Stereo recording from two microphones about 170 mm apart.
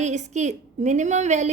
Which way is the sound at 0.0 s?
45° right (ahead or behind).